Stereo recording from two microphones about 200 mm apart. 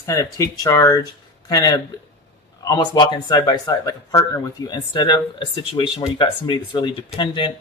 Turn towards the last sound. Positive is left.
turn(degrees=25)  # may be behind; listen again after turning